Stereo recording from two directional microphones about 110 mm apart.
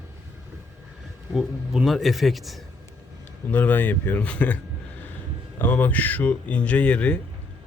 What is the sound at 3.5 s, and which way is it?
Speech, 15° left (ahead or behind).